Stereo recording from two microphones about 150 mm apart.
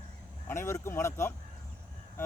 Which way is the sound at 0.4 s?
15° left (ahead or behind).